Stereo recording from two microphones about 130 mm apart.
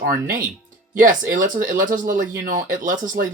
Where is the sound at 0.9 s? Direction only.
90° right.